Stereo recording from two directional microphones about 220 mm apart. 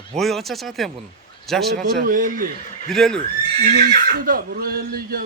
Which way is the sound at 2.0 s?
35° right (ahead or behind).